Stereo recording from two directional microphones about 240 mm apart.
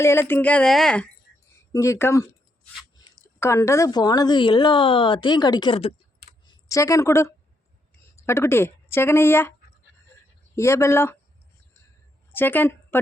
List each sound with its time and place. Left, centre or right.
0.0 s a woman's voice: centre
12.3 s a woman's voice: centre